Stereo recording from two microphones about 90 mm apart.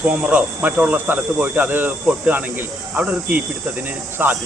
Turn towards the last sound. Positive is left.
turn(degrees=-20)  # may be behind; listen again after turning